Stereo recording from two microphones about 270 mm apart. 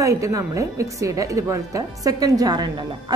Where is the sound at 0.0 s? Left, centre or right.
Centre.